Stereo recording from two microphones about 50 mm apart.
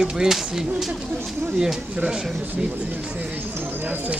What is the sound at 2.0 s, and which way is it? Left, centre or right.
Speech, centre.